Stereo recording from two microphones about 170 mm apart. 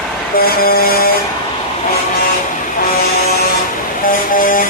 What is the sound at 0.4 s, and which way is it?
Vehicle, 65° left (ahead or behind).